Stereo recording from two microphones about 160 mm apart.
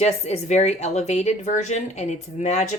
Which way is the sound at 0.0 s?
45° left (ahead or behind).